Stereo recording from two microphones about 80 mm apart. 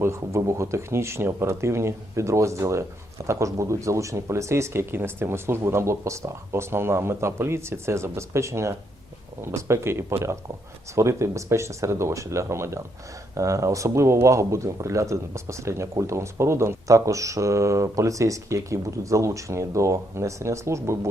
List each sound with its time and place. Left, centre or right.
0.0 s a man's voice: right